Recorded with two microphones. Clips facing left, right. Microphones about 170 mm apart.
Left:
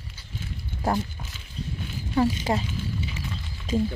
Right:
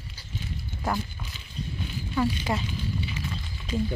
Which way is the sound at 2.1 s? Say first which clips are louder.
Left 4 dB; 35° left (ahead or behind).